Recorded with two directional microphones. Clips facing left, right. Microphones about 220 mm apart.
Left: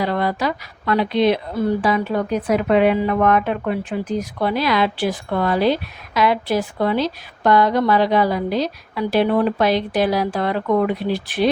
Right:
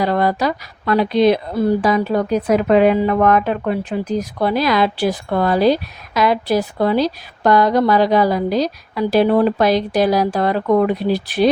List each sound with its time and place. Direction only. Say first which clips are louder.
0.0 s speech: right 3 dB; 40° right (ahead or behind)